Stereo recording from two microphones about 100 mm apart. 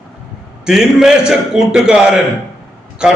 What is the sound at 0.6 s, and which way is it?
A man's voice, 5° right (ahead or behind).